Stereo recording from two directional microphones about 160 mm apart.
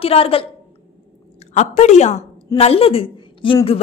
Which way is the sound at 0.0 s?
35° left (ahead or behind).